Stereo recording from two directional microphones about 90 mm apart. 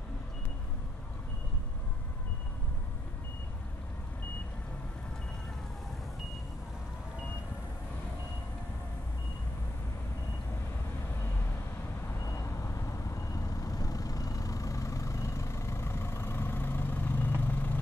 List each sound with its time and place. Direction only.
12.3 s vehicle: 35° left (ahead or behind)